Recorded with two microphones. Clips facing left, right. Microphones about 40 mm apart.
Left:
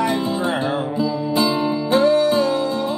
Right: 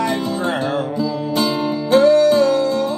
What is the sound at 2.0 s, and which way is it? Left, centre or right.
Music, left.